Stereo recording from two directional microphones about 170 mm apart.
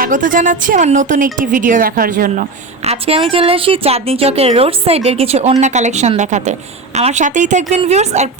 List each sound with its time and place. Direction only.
0.0 s a woman's voice: 50° right (ahead or behind)
2.8 s a woman's voice: 35° right (ahead or behind)